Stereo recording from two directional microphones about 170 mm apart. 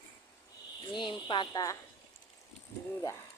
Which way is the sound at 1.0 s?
30° left (ahead or behind).